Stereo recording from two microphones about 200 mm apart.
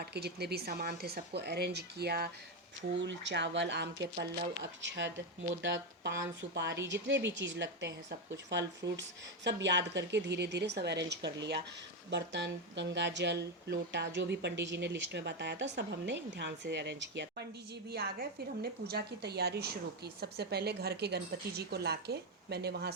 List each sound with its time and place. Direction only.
0.0 s speech: 55° right (ahead or behind)
3.0 s speech: 65° right (ahead or behind)